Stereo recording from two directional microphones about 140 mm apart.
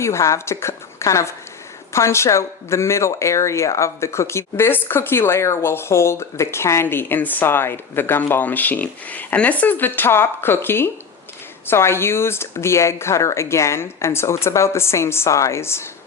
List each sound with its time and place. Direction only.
0.0 s speech: 20° left (ahead or behind)